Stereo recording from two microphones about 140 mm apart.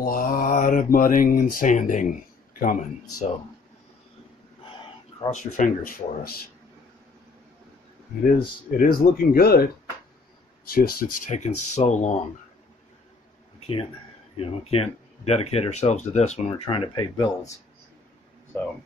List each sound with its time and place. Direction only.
0.0 s mantra: 80° left; by 2.1 s 65° left (ahead or behind)
2.6 s mantra: 75° left (ahead or behind)
5.3 s speech: 65° left (ahead or behind); by 6.3 s 90° left
8.4 s speech: 90° left
11.2 s speech: 55° left (ahead or behind)
13.6 s a sound: 45° left (ahead or behind)
14.3 s speech: 45° left (ahead or behind)